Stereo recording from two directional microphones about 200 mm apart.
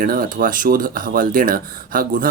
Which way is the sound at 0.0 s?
45° right (ahead or behind).